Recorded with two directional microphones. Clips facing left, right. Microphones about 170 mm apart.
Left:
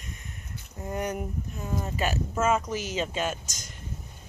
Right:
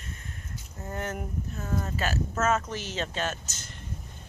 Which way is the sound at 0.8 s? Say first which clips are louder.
Left 3 dB; 15° left (ahead or behind).